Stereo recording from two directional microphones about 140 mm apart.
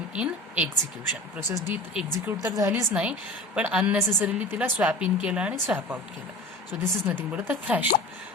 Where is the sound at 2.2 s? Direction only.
25° right (ahead or behind).